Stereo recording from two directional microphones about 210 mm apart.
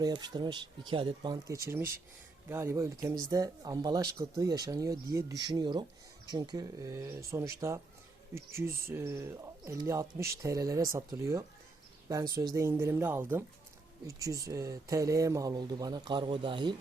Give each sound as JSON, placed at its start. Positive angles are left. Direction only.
{"t": 0.0, "sound": "speech", "side_deg": -20}
{"t": 12.5, "sound": "speech", "side_deg": -10}